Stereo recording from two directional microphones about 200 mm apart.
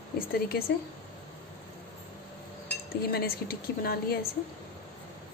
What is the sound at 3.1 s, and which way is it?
Speech, 50° left (ahead or behind).